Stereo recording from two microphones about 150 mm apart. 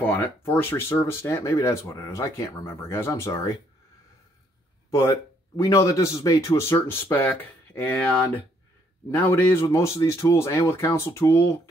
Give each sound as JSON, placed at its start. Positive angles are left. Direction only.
{"t": 0.0, "sound": "speech", "side_deg": 10}
{"t": 5.6, "sound": "speech", "side_deg": 20}